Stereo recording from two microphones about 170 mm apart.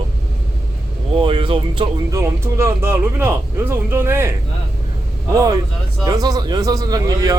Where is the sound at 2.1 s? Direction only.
15° right (ahead or behind).